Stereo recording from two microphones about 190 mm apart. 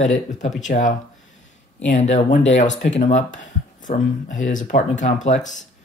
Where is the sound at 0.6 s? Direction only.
40° left (ahead or behind).